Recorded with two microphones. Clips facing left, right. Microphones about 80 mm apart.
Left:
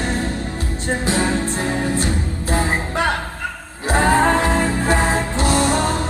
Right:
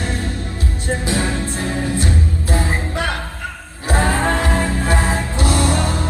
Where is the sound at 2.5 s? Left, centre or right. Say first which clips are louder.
Left 3 dB; left.